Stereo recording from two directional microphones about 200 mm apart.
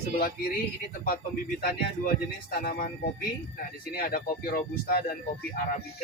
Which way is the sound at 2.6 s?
50° left (ahead or behind).